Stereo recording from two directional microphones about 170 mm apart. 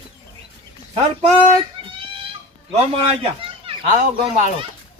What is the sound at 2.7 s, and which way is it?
Speech, 35° right (ahead or behind).